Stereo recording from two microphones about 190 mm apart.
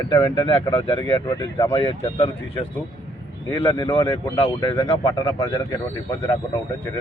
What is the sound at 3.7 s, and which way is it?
Speech, 30° left (ahead or behind).